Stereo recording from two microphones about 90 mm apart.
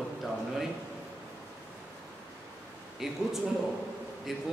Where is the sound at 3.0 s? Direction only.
5° right (ahead or behind).